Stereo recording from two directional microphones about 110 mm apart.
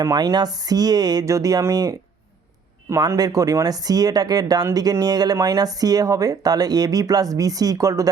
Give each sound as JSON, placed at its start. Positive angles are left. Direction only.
{"t": 0.0, "sound": "speech", "side_deg": -35}